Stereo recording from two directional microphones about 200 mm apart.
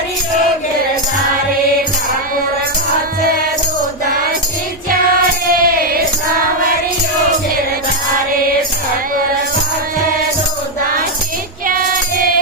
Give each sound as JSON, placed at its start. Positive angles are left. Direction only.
{"t": 5.6, "sound": "music", "side_deg": -45}
{"t": 11.7, "sound": "music", "side_deg": -45}